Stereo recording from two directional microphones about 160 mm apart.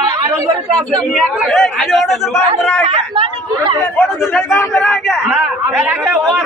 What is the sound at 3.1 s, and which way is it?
Speech, 30° right (ahead or behind).